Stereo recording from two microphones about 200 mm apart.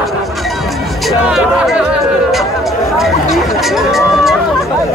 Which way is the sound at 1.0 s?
Centre (ahead or behind).